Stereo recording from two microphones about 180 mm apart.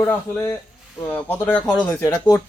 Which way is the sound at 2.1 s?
20° left (ahead or behind).